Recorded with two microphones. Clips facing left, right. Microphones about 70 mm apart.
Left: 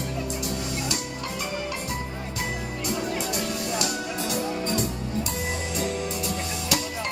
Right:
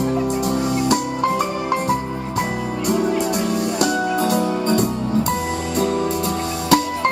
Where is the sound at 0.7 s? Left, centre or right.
Right.